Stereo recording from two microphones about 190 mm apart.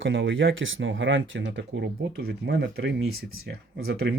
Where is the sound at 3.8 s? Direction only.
65° right (ahead or behind).